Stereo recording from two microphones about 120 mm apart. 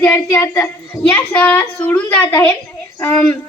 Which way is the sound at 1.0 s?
10° left (ahead or behind).